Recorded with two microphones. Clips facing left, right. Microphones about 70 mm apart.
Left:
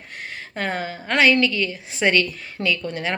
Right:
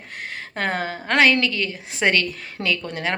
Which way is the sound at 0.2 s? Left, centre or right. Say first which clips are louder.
Right 1 dB; right.